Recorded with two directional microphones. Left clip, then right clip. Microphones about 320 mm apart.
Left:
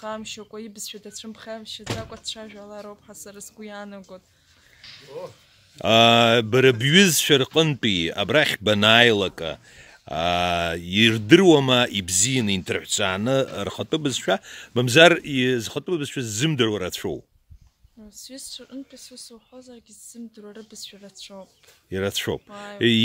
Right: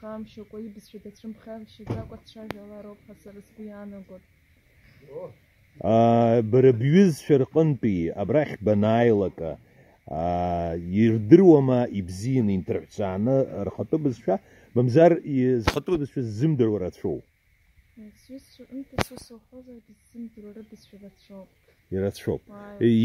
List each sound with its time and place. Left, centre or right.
0.0 s speech: centre
5.8 s speech: centre
15.7 s speech: centre
16.0 s speech: centre
19.0 s speech: centre
21.9 s speech: centre